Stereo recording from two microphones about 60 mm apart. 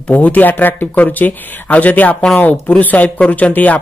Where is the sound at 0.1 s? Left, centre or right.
Left.